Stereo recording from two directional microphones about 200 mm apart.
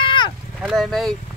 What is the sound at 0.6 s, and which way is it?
Speech, centre (ahead or behind).